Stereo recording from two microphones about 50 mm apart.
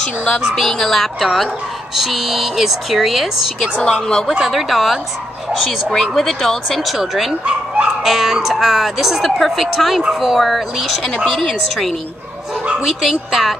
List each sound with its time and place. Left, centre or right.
0.6 s speech: centre
3.8 s speech: centre
4.3 s speech: centre
7.4 s dog: right
8.0 s speech: centre